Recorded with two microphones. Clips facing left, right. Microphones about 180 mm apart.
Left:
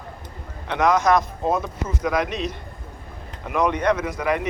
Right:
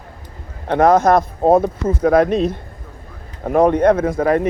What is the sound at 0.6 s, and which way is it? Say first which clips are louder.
Speech: right 7 dB; 50° right (ahead or behind).